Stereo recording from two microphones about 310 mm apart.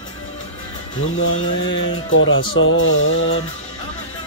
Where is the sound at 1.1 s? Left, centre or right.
Left.